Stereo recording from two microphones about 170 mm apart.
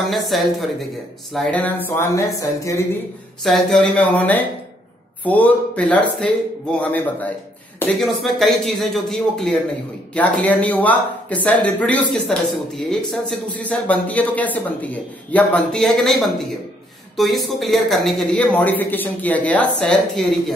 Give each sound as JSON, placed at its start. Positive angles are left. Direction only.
{"t": 0.1, "sound": "speech", "side_deg": 0}
{"t": 1.9, "sound": "speech", "side_deg": 15}
{"t": 3.4, "sound": "speech", "side_deg": 0}